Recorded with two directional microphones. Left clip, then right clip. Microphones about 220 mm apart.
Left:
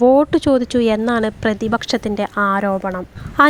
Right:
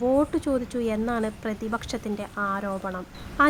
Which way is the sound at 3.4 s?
40° left (ahead or behind).